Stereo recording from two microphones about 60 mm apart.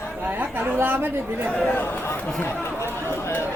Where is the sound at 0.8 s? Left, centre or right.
Right.